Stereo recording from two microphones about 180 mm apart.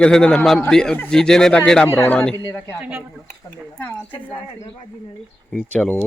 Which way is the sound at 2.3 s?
20° left (ahead or behind).